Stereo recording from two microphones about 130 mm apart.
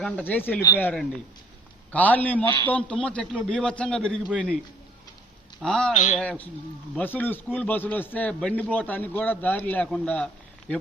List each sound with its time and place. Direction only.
0.0 s a man's voice: 15° left (ahead or behind)
5.6 s speech: 5° left (ahead or behind)
5.9 s a man's voice: 75° left (ahead or behind)
6.1 s a man's voice: 10° left (ahead or behind)